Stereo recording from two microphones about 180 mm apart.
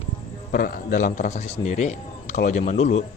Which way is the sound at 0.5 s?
50° left (ahead or behind).